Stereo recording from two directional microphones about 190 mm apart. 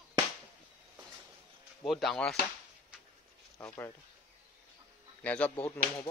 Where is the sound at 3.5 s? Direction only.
15° left (ahead or behind).